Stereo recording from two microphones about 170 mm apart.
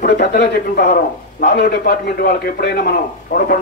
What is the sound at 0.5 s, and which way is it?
A man's voice, 65° left (ahead or behind).